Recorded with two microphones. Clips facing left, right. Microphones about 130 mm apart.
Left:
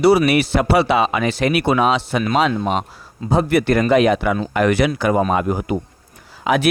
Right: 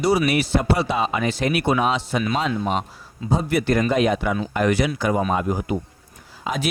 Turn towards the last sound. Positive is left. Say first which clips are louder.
# left 8 dB
turn(degrees=70)  # may be behind; listen again after turning